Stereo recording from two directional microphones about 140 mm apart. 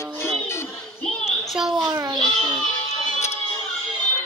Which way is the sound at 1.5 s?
5° right (ahead or behind).